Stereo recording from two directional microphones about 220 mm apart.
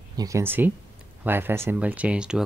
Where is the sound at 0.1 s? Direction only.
15° right (ahead or behind).